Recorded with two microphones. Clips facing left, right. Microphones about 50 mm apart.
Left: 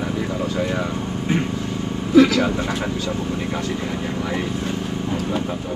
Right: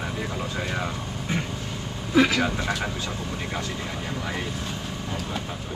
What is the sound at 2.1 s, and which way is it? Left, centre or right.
Speech, right.